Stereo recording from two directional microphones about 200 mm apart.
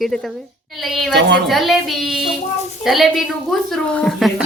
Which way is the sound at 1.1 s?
55° right (ahead or behind).